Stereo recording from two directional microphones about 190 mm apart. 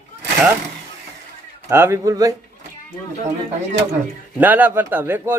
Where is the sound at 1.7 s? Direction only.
15° right (ahead or behind).